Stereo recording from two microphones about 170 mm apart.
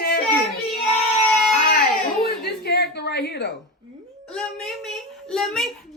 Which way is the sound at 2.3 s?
70° left (ahead or behind).